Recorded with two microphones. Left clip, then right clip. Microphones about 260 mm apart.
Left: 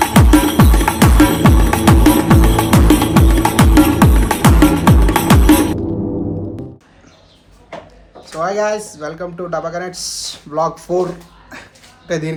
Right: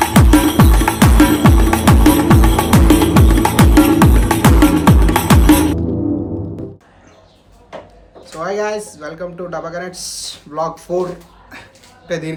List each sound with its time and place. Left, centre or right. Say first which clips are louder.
0.0 s music: even; centre
8.2 s speech: left 3 dB; centre
11.5 s a sound: left 1 dB; centre